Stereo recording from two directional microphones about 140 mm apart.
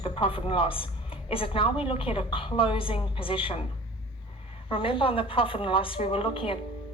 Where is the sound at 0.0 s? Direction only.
40° left (ahead or behind).